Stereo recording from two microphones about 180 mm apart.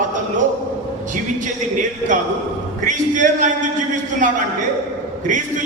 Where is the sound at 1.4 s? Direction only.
45° right (ahead or behind).